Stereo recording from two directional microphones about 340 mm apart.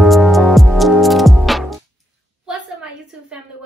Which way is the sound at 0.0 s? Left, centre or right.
Centre.